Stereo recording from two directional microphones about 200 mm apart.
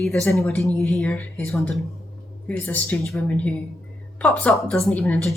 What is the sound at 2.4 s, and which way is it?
A woman's voice, 10° left (ahead or behind).